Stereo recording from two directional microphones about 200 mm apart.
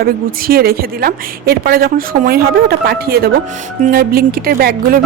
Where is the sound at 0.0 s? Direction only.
50° right (ahead or behind).